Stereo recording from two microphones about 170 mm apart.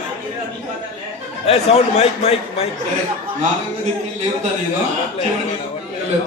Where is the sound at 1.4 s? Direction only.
35° left (ahead or behind).